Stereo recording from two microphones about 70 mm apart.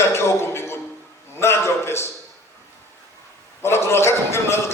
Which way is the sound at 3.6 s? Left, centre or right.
Left.